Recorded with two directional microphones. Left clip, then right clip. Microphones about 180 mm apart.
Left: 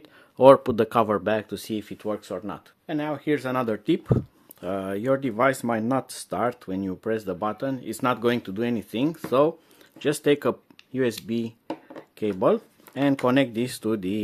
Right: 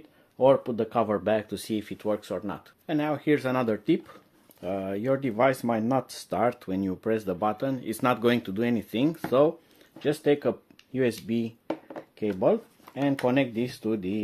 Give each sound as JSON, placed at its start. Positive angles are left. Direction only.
{"t": 0.4, "sound": "speech", "side_deg": 50}
{"t": 0.9, "sound": "speech", "side_deg": 25}
{"t": 9.9, "sound": "speech", "side_deg": 30}
{"t": 10.9, "sound": "speech", "side_deg": 15}
{"t": 11.9, "sound": "speech", "side_deg": 25}